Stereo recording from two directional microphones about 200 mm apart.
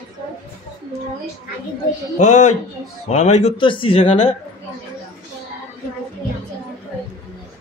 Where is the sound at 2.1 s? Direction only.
35° left (ahead or behind).